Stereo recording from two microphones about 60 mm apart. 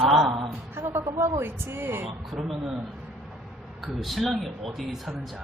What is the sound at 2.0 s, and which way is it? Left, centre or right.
Speech, centre.